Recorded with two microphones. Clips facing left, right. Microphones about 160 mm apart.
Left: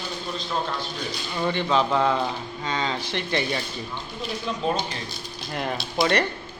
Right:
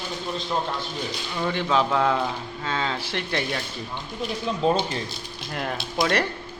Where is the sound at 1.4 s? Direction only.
Centre (ahead or behind).